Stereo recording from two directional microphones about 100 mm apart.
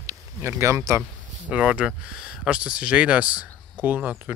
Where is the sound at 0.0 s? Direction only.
25° right (ahead or behind).